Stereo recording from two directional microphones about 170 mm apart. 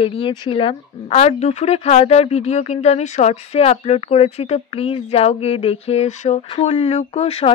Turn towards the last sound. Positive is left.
turn(degrees=35)  # may be behind; listen again after turning